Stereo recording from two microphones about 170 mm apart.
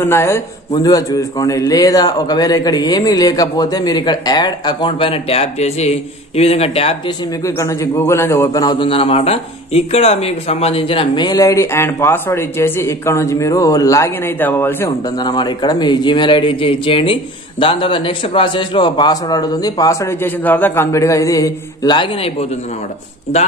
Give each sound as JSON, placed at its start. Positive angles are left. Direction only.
{"t": 0.0, "sound": "a man's voice", "side_deg": 15}
{"t": 7.4, "sound": "a man's voice", "side_deg": 20}
{"t": 14.9, "sound": "a man's voice", "side_deg": 25}